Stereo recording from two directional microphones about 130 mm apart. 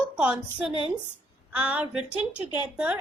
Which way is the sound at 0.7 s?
40° left (ahead or behind).